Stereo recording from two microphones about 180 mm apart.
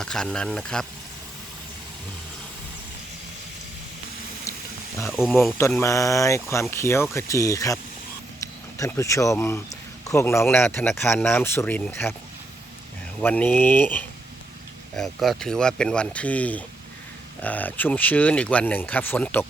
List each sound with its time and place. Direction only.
0.0 s speech: 5° left (ahead or behind)
4.5 s a sound: 15° left (ahead or behind)
5.1 s speech: centre (ahead or behind)
5.5 s speech: 15° left (ahead or behind)
13.2 s speech: 10° left (ahead or behind)